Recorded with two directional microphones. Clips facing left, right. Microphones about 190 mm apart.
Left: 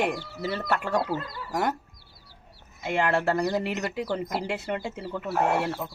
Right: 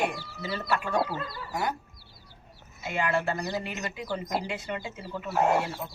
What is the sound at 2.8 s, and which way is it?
Speech, 70° left (ahead or behind).